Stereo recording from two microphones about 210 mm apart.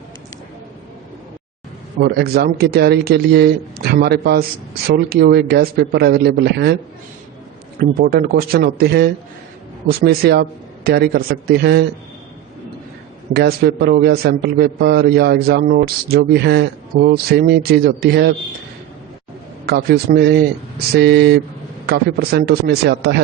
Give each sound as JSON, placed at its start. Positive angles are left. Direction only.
{"t": 2.0, "sound": "a man's voice", "side_deg": -50}
{"t": 7.8, "sound": "a man's voice", "side_deg": -45}
{"t": 13.3, "sound": "a man's voice", "side_deg": -45}
{"t": 19.6, "sound": "a man's voice", "side_deg": -50}